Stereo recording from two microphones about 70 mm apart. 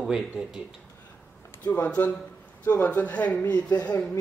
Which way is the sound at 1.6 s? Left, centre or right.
Left.